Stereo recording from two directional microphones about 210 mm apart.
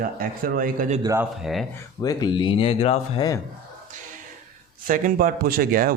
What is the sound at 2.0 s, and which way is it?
Speech, 20° left (ahead or behind).